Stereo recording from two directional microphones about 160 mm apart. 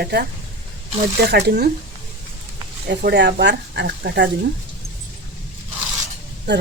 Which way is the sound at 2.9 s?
90° right.